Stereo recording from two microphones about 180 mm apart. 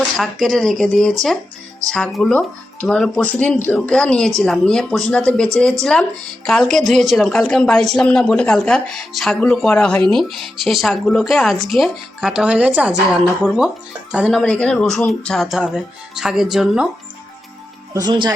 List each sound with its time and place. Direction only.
0.2 s a woman's voice: centre (ahead or behind)
17.9 s speech: 25° right (ahead or behind)